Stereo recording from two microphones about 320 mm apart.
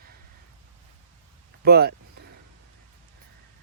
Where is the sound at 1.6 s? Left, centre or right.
Right.